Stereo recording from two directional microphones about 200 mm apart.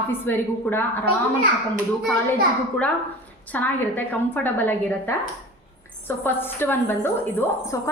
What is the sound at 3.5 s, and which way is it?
A woman's voice, 10° left (ahead or behind).